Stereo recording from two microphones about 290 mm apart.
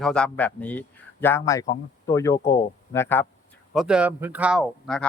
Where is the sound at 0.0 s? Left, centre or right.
Centre.